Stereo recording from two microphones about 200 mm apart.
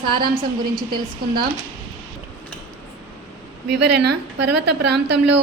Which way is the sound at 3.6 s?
55° right (ahead or behind).